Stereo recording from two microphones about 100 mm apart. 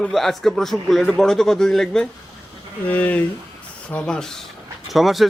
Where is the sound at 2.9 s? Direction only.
15° left (ahead or behind).